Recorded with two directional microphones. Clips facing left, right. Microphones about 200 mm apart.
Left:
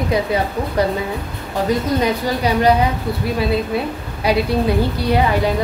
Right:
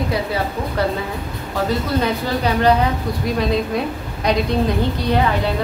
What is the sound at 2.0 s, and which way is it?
Speech, 10° left (ahead or behind).